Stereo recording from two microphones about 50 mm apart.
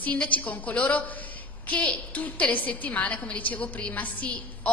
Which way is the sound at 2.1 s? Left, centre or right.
Left.